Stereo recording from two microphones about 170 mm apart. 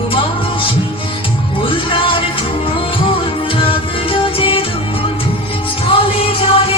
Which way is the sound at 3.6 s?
30° left (ahead or behind).